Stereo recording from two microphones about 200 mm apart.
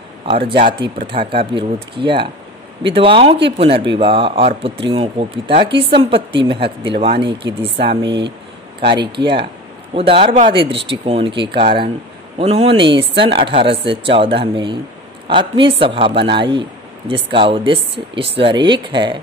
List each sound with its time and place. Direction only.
0.3 s speech: 25° right (ahead or behind)
5.7 s a woman's voice: 55° right (ahead or behind)
6.5 s speech: 25° right (ahead or behind)